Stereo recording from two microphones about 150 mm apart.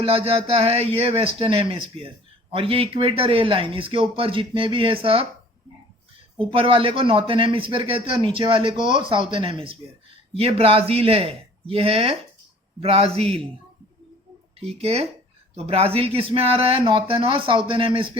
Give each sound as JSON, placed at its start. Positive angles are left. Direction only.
{"t": 0.0, "sound": "speech", "side_deg": -40}
{"t": 6.5, "sound": "a man's voice", "side_deg": -35}
{"t": 14.6, "sound": "a man's voice", "side_deg": -45}